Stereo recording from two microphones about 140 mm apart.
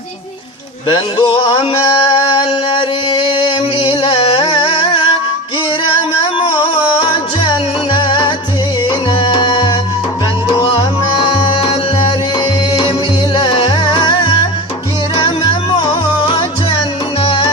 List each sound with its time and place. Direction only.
0.9 s music: 35° left (ahead or behind)
13.3 s music: 35° left (ahead or behind)